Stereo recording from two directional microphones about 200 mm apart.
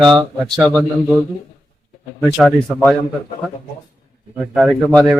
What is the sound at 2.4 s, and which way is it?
Speech, centre (ahead or behind).